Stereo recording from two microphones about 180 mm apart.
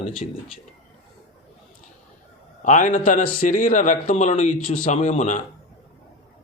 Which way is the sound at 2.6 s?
45° left (ahead or behind).